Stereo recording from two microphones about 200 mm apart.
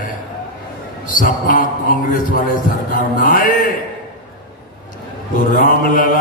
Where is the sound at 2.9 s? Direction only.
40° left (ahead or behind).